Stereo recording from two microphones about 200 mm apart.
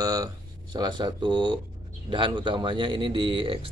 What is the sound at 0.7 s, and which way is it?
Speech, 20° right (ahead or behind).